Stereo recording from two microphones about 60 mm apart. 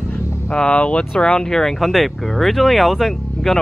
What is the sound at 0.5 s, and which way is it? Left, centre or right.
Speech, centre.